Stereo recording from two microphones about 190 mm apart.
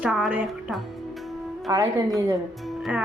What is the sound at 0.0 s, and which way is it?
Speech, 5° right (ahead or behind).